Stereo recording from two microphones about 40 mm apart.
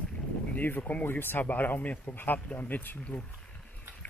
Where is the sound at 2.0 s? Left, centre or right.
Left.